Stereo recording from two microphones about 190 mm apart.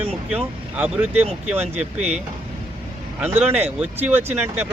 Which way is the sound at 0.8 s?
5° right (ahead or behind).